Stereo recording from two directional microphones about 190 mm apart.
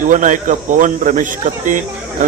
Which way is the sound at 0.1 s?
40° right (ahead or behind).